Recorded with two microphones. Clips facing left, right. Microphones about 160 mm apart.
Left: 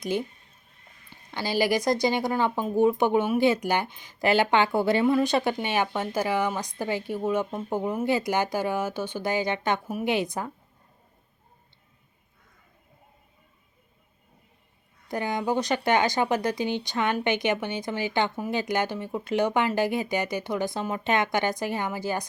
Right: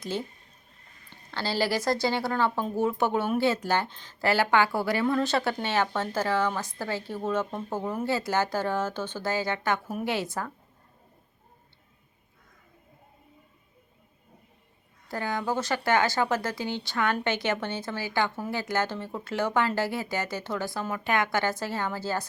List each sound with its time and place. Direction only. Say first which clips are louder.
0.0 s speech: left 4 dB; 15° left (ahead or behind)
1.3 s speech: left 3 dB; 15° left (ahead or behind)
15.0 s speech: left 3 dB; 20° left (ahead or behind)